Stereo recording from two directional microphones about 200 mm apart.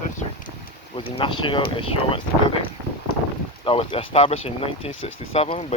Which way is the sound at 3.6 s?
25° left (ahead or behind).